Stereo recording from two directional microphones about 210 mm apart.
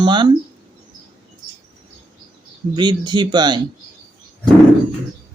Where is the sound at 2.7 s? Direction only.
20° right (ahead or behind).